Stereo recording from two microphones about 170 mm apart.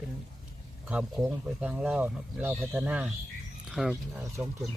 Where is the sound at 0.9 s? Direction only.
5° right (ahead or behind).